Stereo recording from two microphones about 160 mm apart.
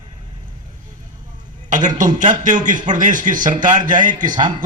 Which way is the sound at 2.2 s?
50° right (ahead or behind).